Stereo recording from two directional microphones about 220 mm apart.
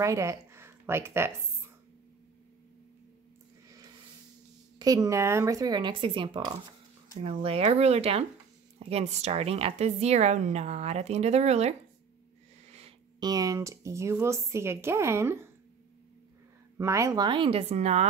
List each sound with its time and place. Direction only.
0.0 s speech: 15° right (ahead or behind)
4.7 s speech: 15° right (ahead or behind)
16.7 s speech: 15° right (ahead or behind); by 18.0 s 30° right (ahead or behind)